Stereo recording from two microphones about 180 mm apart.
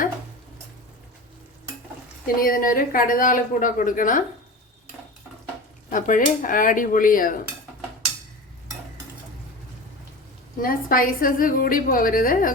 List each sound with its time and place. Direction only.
2.2 s a woman's voice: 50° left (ahead or behind)
5.9 s a woman's voice: 45° left (ahead or behind)
10.6 s a woman's voice: 50° left (ahead or behind)